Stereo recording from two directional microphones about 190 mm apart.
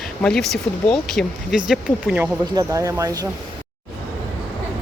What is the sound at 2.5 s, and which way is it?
Speech, 15° right (ahead or behind).